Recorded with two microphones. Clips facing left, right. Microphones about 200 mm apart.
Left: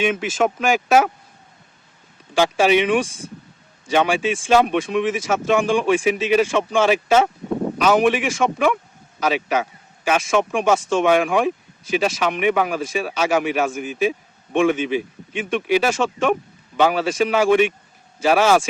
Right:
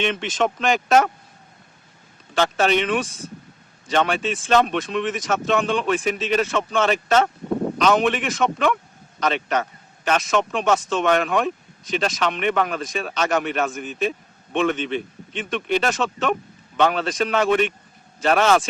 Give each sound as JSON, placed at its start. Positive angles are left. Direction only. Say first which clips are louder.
{"t": 0.0, "sound": "speech", "louder": "left 3 dB", "side_deg": 5}
{"t": 2.3, "sound": "speech", "louder": "left 3 dB", "side_deg": 10}